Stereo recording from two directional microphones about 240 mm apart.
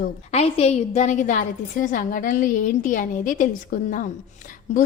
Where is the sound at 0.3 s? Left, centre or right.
Left.